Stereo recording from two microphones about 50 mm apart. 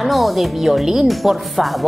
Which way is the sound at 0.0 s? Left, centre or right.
Centre.